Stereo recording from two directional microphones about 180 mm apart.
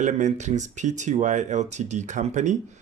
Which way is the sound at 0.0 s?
40° right (ahead or behind).